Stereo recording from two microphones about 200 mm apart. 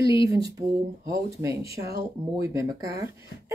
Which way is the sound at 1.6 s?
50° right (ahead or behind).